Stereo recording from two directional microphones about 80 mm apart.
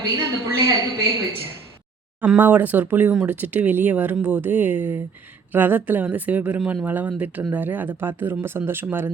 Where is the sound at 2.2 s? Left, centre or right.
Centre.